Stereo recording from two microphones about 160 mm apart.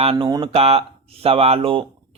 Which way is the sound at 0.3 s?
25° right (ahead or behind).